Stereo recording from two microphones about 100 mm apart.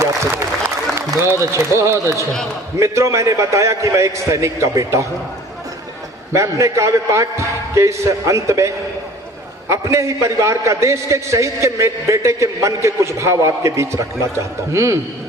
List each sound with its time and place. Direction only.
0.0 s a man's voice: 30° right (ahead or behind)
6.3 s a man's voice: 30° right (ahead or behind)